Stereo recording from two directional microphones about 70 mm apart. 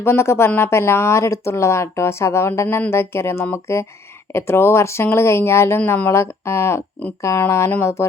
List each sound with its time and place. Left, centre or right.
0.0 s speech: left